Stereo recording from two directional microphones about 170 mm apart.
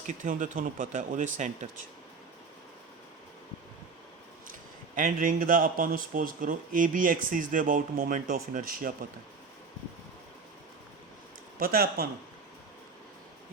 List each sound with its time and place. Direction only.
0.1 s speech: 50° right (ahead or behind)
4.9 s speech: 50° right (ahead or behind)
11.6 s speech: 60° right (ahead or behind)